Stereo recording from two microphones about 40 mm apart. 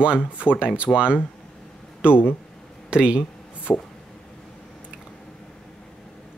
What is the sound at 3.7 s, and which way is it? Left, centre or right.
Speech, left.